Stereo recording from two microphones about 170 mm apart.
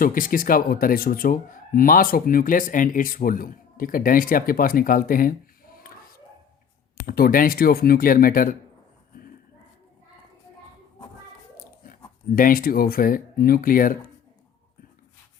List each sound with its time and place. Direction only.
0.0 s speech: 55° left (ahead or behind)
5.7 s a sound: 60° left (ahead or behind)
7.1 s speech: 55° left (ahead or behind)
12.4 s speech: 55° left (ahead or behind)